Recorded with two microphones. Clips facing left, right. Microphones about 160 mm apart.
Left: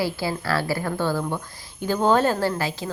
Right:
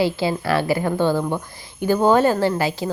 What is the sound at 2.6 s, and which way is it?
Speech, 30° right (ahead or behind).